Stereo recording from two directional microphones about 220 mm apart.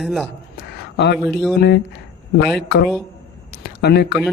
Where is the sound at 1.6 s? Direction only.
50° left (ahead or behind).